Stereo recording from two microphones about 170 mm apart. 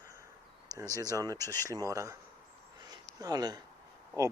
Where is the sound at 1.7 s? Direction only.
20° right (ahead or behind).